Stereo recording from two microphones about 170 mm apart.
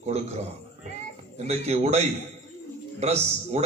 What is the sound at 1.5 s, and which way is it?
A man's voice, 40° right (ahead or behind).